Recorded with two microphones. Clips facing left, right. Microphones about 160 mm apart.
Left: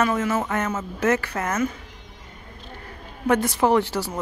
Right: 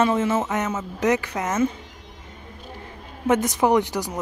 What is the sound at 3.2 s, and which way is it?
Speech, 20° right (ahead or behind).